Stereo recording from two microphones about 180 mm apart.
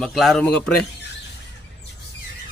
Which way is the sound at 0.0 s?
Centre (ahead or behind).